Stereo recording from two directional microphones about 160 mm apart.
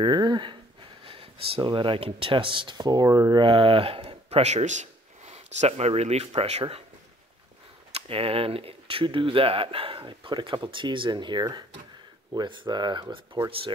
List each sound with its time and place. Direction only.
0.0 s speech: 25° right (ahead or behind)
7.9 s speech: 35° right (ahead or behind)